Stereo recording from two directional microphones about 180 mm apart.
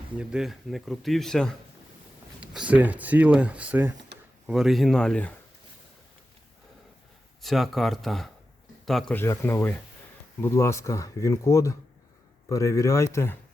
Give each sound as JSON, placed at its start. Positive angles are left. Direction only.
{"t": 0.2, "sound": "speech", "side_deg": -5}
{"t": 7.4, "sound": "speech", "side_deg": 0}
{"t": 9.1, "sound": "speech", "side_deg": 15}